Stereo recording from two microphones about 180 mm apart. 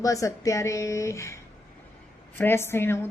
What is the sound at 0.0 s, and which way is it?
A woman's voice, 20° left (ahead or behind).